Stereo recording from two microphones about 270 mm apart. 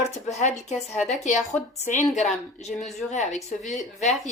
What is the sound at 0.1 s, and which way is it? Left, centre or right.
A woman's voice, left.